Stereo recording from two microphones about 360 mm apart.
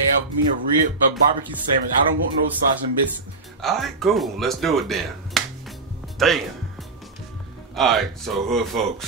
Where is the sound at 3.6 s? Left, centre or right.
Centre.